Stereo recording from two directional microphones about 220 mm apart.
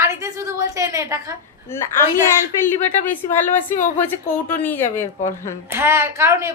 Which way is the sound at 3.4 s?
35° left (ahead or behind).